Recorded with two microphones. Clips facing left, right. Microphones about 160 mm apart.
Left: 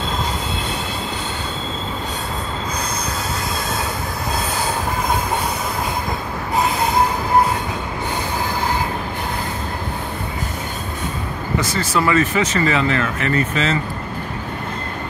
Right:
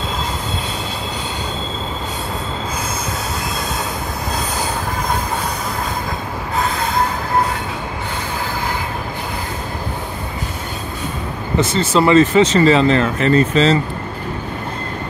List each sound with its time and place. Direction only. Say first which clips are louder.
11.5 s speech: right 5 dB; 25° right (ahead or behind)